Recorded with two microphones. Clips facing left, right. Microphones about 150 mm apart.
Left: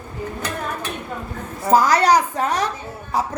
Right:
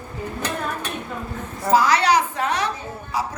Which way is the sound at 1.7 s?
45° left (ahead or behind).